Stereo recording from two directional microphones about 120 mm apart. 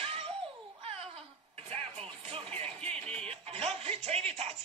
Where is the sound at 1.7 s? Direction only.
60° right (ahead or behind).